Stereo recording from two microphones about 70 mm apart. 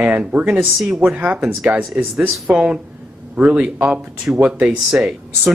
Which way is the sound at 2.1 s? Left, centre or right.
Centre.